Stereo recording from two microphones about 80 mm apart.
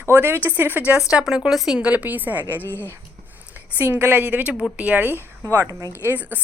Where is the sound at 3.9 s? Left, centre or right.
Centre.